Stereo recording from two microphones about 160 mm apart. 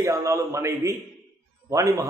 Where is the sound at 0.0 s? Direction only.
20° right (ahead or behind).